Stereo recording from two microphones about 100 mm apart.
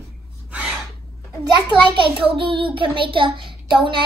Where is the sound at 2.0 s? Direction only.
60° right (ahead or behind).